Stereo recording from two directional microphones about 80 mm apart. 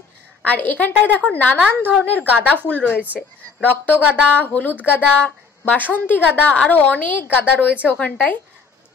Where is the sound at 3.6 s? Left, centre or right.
Centre.